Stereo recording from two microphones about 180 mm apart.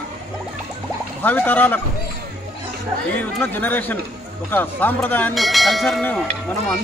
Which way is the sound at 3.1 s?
10° left (ahead or behind).